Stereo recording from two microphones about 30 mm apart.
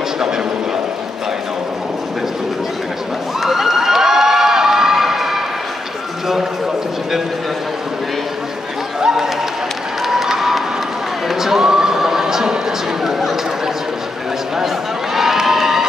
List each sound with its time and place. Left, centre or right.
3.3 s cheering: centre
9.0 s a sound: centre
13.0 s chatter: centre
15.1 s crowd: centre